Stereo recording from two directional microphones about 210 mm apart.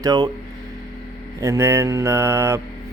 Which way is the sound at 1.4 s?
15° right (ahead or behind).